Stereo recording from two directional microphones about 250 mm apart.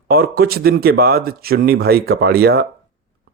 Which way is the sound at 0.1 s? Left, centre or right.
Right.